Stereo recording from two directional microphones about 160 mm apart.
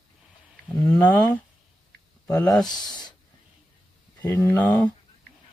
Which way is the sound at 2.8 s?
25° left (ahead or behind).